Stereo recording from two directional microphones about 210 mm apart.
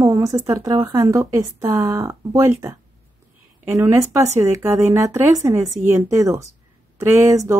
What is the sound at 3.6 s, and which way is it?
Speech, 10° right (ahead or behind).